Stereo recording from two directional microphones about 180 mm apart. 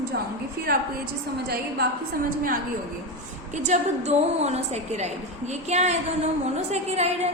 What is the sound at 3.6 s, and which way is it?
A woman's voice, 40° right (ahead or behind).